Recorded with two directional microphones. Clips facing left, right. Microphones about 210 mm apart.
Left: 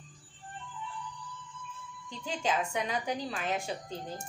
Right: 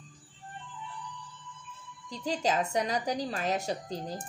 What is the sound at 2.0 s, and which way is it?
A woman's voice, 35° right (ahead or behind).